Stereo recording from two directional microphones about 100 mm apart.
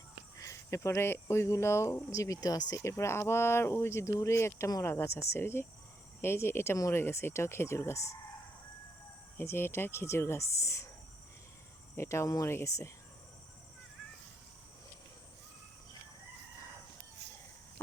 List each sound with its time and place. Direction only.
0.3 s speech: 30° left (ahead or behind)
9.4 s speech: 25° left (ahead or behind)
11.9 s speech: 30° left (ahead or behind)